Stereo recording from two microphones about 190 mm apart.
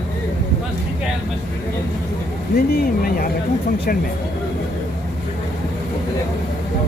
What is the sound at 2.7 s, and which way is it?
Speech, 50° left (ahead or behind).